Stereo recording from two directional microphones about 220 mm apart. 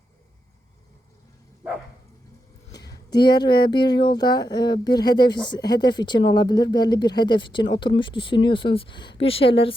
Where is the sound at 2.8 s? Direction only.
15° left (ahead or behind).